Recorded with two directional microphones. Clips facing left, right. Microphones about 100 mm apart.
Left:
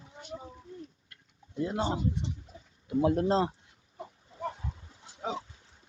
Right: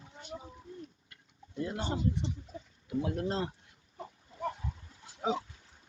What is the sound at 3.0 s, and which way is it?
Speech, 35° left (ahead or behind).